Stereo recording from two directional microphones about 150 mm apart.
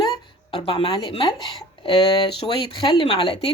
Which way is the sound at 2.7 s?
30° left (ahead or behind).